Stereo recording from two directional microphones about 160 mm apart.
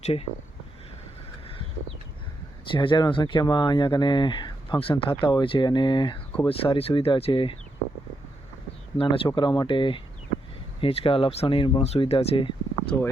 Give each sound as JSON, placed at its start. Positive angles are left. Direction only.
{"t": 0.0, "sound": "speech", "side_deg": 40}
{"t": 2.7, "sound": "speech", "side_deg": 30}
{"t": 9.0, "sound": "speech", "side_deg": 35}